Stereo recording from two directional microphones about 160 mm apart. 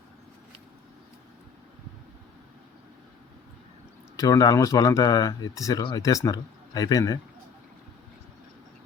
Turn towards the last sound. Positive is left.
turn(degrees=25)  # may be behind; listen again after turning